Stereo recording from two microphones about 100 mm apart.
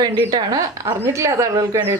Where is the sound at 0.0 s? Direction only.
45° right (ahead or behind).